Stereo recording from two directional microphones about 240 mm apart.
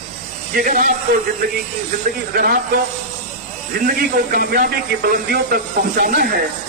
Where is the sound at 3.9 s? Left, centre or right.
Right.